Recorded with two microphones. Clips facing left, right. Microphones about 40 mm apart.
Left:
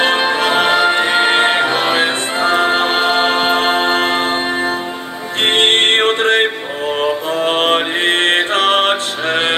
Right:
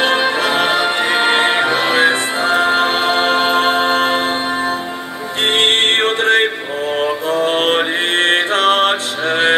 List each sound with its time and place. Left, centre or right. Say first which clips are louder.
0.1 s music: left 1 dB; left